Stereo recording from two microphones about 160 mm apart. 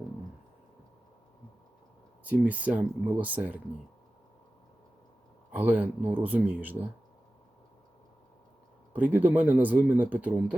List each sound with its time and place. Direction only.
2.2 s speech: 10° right (ahead or behind)
5.5 s speech: 10° right (ahead or behind)
8.9 s speech: 10° right (ahead or behind)